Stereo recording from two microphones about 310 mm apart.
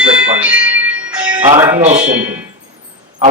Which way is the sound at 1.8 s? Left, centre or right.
Right.